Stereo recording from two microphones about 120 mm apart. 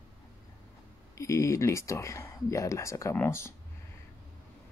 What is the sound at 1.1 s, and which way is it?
Speech, 25° left (ahead or behind).